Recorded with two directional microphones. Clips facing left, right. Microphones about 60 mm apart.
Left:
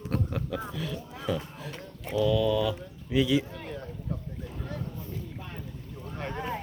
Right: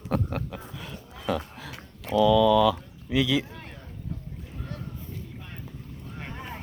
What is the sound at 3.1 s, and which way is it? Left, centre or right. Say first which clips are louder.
Speech: even; right.